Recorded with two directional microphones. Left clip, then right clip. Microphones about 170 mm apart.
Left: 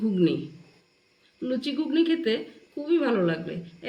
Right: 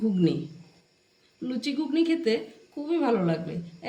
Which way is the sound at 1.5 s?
75° right (ahead or behind).